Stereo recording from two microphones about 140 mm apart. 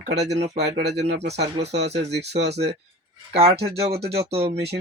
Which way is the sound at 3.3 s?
45° right (ahead or behind).